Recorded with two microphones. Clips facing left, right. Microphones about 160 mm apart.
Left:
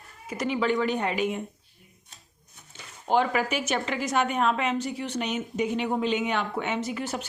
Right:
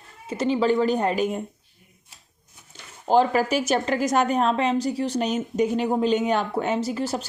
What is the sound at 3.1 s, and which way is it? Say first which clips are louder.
A woman's voice: right 5 dB; 35° right (ahead or behind).